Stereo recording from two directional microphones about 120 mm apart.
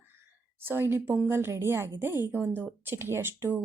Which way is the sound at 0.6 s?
20° right (ahead or behind).